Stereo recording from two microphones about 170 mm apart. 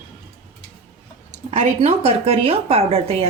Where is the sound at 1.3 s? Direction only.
45° right (ahead or behind).